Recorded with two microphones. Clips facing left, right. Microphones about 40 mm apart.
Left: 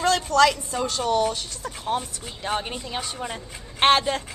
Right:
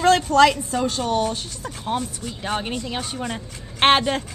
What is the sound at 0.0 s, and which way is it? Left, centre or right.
Speech, right.